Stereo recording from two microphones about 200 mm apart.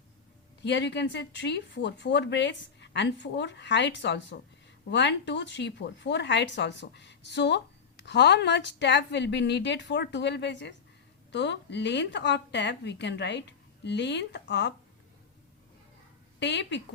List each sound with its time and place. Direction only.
0.6 s speech: 60° left (ahead or behind)
16.4 s speech: 60° left (ahead or behind)